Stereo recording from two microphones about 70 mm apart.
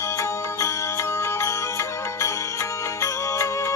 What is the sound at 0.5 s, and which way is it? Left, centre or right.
Music, left.